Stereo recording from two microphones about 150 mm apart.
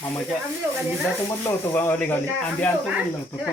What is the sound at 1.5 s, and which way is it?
Speech, 15° left (ahead or behind).